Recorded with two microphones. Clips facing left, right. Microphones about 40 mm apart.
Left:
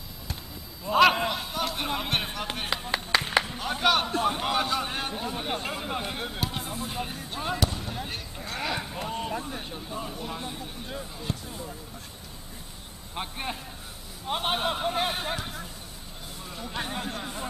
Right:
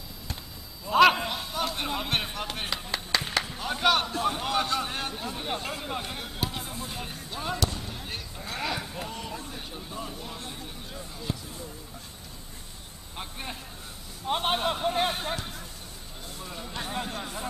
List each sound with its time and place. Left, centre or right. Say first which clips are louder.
0.8 s a man's voice: right 1 dB; centre
1.3 s a sound: left 1 dB; centre
1.9 s a man's voice: left 1 dB; centre
2.7 s a man's voice: left 5 dB; centre
6.4 s music: right 2 dB; centre
7.3 s fireworks: left 1 dB; centre
9.1 s a sound: left 6 dB; left
9.6 s speech: left 2 dB; centre
13.1 s speech: left 4 dB; left
14.2 s a man's voice: right 1 dB; centre
16.9 s a man's voice: even; centre